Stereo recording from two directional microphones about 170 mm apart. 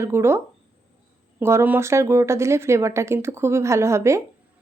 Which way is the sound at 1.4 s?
15° right (ahead or behind).